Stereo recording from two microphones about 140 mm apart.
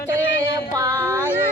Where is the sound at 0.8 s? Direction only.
20° right (ahead or behind).